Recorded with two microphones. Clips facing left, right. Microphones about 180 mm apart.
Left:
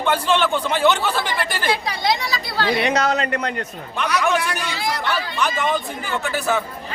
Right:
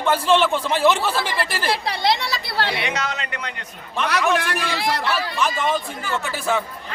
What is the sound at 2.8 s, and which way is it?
Speech, 40° left (ahead or behind).